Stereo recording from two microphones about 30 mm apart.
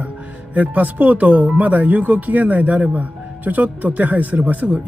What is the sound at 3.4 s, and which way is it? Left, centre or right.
Speech, right.